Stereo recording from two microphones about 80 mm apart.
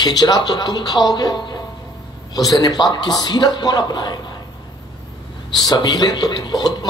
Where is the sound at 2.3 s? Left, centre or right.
Left.